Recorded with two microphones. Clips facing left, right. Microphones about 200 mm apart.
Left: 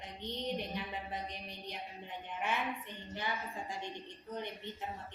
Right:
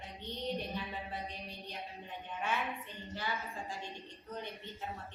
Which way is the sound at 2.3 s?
15° left (ahead or behind).